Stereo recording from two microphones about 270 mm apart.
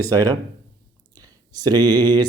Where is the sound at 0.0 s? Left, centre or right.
Centre.